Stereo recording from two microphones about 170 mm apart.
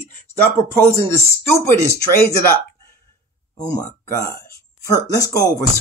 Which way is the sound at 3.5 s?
20° left (ahead or behind).